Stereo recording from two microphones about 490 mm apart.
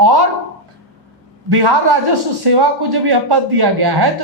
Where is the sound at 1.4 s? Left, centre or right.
Right.